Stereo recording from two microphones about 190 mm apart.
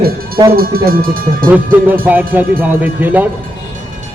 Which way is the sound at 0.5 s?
50° right (ahead or behind).